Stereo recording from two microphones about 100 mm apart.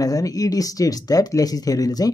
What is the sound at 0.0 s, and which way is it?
Speech, 35° left (ahead or behind).